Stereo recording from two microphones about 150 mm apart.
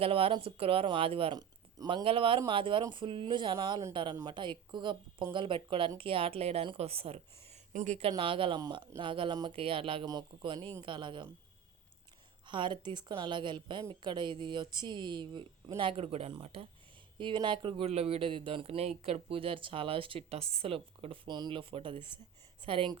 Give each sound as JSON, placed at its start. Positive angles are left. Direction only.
{"t": 0.0, "sound": "speech", "side_deg": -40}
{"t": 7.7, "sound": "speech", "side_deg": -55}
{"t": 8.1, "sound": "speech", "side_deg": -35}
{"t": 12.5, "sound": "speech", "side_deg": -30}